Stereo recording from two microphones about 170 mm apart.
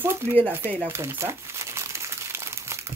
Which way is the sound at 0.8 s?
15° right (ahead or behind).